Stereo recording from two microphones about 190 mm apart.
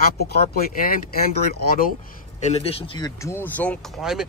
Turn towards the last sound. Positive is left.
turn(degrees=0)  # may be behind; listen again after turning